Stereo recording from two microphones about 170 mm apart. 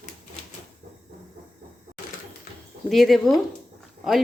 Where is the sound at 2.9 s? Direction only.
Centre (ahead or behind).